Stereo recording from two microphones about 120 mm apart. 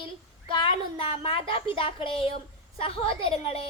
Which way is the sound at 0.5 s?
50° left (ahead or behind).